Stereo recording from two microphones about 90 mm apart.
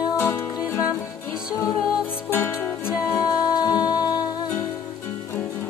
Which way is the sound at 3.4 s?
50° left (ahead or behind).